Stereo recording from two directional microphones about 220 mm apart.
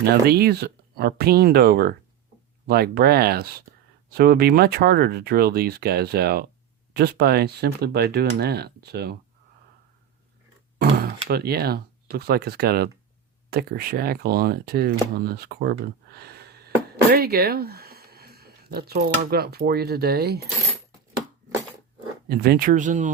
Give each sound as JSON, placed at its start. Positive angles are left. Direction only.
{"t": 0.1, "sound": "speech", "side_deg": -45}
{"t": 10.8, "sound": "speech", "side_deg": -45}
{"t": 22.3, "sound": "speech", "side_deg": -45}